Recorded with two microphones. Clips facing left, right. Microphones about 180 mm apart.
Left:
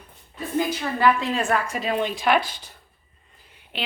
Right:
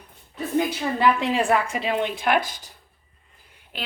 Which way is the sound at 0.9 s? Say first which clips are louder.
Even; 20° right (ahead or behind).